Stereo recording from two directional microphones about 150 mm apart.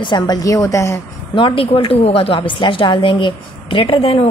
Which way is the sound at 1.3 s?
35° left (ahead or behind).